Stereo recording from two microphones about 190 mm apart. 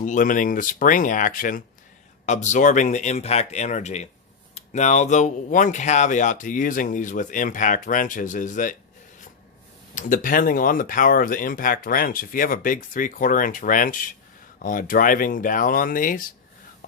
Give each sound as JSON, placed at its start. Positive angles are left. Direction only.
{"t": 0.0, "sound": "speech", "side_deg": 45}
{"t": 9.9, "sound": "speech", "side_deg": 45}